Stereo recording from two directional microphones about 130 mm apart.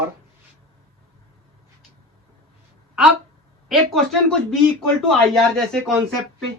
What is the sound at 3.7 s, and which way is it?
Speech, centre (ahead or behind).